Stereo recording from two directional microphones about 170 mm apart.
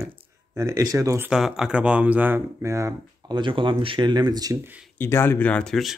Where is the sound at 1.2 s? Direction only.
5° right (ahead or behind).